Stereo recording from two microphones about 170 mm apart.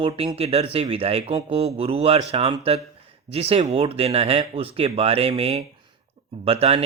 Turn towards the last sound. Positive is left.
turn(degrees=-35)  # may be behind; listen again after turning